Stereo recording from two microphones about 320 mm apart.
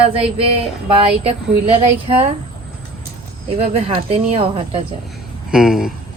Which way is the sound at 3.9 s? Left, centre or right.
Centre.